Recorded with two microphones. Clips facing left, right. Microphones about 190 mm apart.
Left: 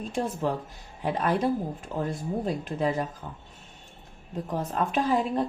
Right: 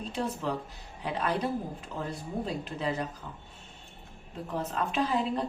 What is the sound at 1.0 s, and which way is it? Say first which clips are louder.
A woman's voice: left 5 dB; 50° left (ahead or behind).